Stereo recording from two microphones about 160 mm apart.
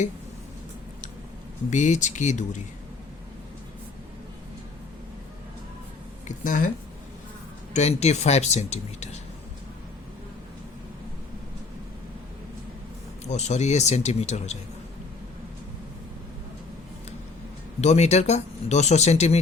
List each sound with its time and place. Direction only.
1.7 s speech: 50° left (ahead or behind)
6.2 s speech: 55° left (ahead or behind)
7.7 s speech: 45° left (ahead or behind)
13.3 s speech: 45° left (ahead or behind)
17.7 s speech: 45° left (ahead or behind)